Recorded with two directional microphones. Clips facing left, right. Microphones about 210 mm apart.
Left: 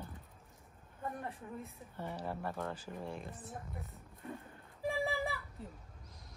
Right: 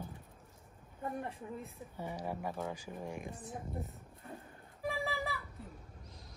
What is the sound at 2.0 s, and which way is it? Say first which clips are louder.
A woman's voice: right 1 dB; 10° right (ahead or behind).